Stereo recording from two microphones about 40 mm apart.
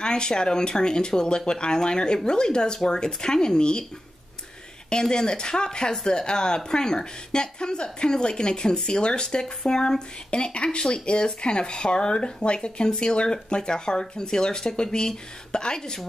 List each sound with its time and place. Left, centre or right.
0.0 s speech: centre
5.1 s speech: centre